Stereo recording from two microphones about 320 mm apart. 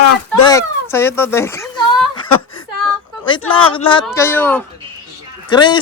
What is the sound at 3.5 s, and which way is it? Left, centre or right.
Speech, centre.